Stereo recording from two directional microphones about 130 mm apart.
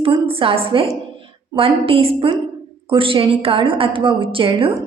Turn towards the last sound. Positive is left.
turn(degrees=-45)  # may be behind; listen again after turning